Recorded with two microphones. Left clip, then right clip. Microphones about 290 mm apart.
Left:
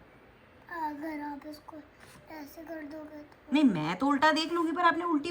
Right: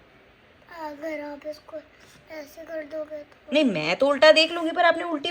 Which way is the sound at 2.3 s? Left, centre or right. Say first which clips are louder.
Right 6 dB; centre.